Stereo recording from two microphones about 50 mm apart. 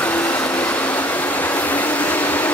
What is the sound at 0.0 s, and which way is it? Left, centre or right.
Vehicle, left.